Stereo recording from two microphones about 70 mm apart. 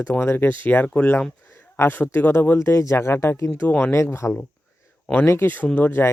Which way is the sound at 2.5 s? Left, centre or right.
Left.